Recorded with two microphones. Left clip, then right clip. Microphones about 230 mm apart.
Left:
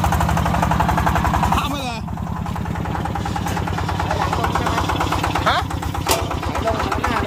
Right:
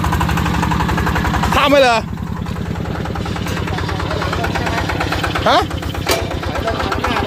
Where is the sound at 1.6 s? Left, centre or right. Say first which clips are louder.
Right 13 dB; right.